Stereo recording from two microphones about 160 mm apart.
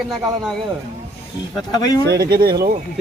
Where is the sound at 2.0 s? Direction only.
90° right.